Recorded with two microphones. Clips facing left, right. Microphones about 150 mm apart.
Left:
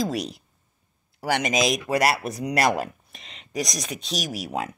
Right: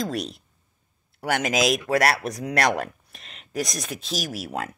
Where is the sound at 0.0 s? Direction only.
Centre (ahead or behind).